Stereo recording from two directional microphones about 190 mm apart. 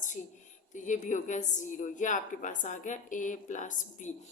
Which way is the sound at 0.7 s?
40° left (ahead or behind).